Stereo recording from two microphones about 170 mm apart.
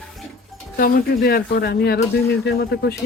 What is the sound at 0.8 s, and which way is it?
Speech, 60° left (ahead or behind).